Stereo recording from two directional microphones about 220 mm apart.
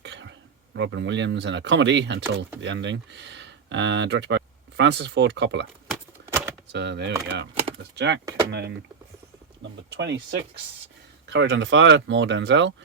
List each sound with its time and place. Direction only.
0.0 s a sound: 55° right (ahead or behind)
0.8 s speech: 55° right (ahead or behind)
6.2 s typewriter: 10° right (ahead or behind)
6.7 s speech: 50° right (ahead or behind)
8.2 s speech: 15° right (ahead or behind)
8.4 s speech: 50° right (ahead or behind)
9.9 s speech: 50° right (ahead or behind)
11.3 s speech: 55° right (ahead or behind)